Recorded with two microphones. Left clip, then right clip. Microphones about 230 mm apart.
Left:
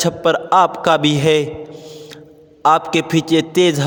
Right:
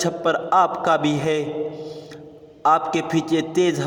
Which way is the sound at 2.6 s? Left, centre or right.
Left.